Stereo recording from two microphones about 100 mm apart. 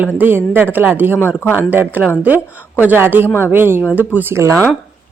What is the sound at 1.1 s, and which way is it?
Speech, 20° left (ahead or behind).